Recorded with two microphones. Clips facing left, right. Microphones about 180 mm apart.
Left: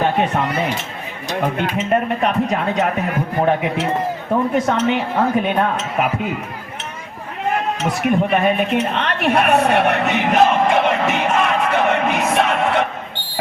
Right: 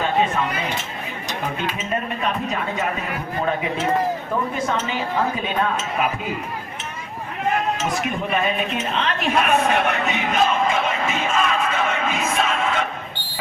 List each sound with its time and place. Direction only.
0.0 s speech: 70° left (ahead or behind)
1.5 s speech: 70° left (ahead or behind)
8.0 s a sound: 60° left (ahead or behind)